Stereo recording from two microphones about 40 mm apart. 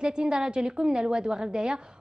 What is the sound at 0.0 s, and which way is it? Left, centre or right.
A woman's voice, right.